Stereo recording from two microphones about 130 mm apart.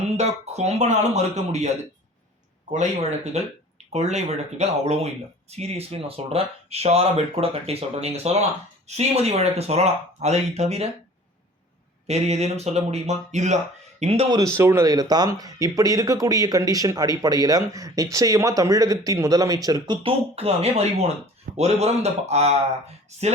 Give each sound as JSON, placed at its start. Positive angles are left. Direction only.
{"t": 0.0, "sound": "speech", "side_deg": -55}
{"t": 2.7, "sound": "speech", "side_deg": -60}
{"t": 12.0, "sound": "speech", "side_deg": -55}
{"t": 14.0, "sound": "speech", "side_deg": -50}
{"t": 14.3, "sound": "a man's voice", "side_deg": -30}
{"t": 20.0, "sound": "speech", "side_deg": -45}